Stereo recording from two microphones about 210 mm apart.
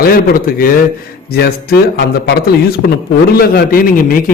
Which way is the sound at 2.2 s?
50° left (ahead or behind).